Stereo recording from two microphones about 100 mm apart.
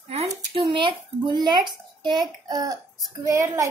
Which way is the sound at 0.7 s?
55° right (ahead or behind).